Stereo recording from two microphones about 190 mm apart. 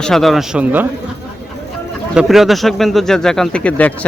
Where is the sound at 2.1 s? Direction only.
Centre (ahead or behind).